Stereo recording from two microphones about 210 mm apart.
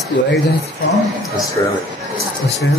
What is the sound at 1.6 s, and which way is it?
Speech, 15° left (ahead or behind).